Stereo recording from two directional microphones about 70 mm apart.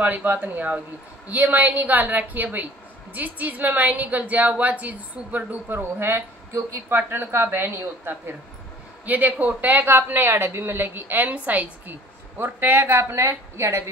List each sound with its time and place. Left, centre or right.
0.0 s a woman's voice: right
9.0 s a woman's voice: right
12.4 s a woman's voice: right